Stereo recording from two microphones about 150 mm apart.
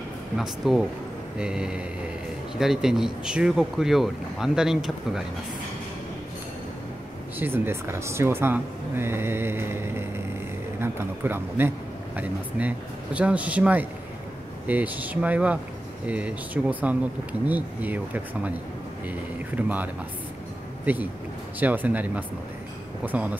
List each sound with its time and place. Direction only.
0.4 s speech: 5° right (ahead or behind)
7.3 s speech: 15° right (ahead or behind)